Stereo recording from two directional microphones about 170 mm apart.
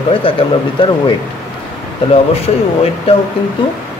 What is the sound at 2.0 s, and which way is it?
Speech, 30° left (ahead or behind).